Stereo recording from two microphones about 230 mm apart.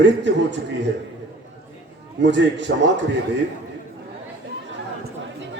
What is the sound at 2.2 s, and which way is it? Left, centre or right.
Speech, right.